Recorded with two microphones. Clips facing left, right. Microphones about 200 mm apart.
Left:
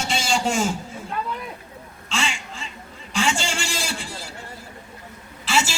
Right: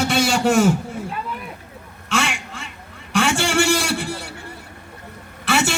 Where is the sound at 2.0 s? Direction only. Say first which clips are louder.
Right 5 dB; 65° right (ahead or behind).